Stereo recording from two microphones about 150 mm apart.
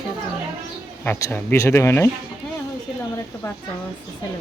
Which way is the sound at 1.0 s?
15° left (ahead or behind).